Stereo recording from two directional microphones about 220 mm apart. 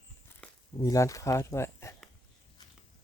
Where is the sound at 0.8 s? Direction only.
15° left (ahead or behind).